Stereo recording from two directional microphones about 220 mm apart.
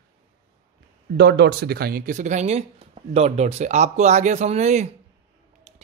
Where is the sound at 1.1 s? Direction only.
50° right (ahead or behind).